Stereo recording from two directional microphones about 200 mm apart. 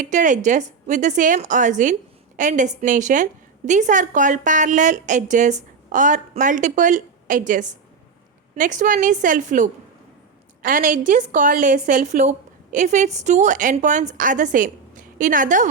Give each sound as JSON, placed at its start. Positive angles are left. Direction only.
{"t": 0.0, "sound": "a woman's voice", "side_deg": -40}